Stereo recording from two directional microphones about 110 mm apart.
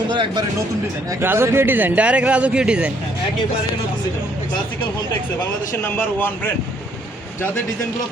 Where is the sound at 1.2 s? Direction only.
20° right (ahead or behind).